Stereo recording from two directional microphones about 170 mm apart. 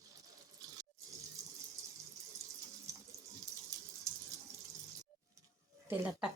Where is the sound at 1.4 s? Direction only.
20° right (ahead or behind).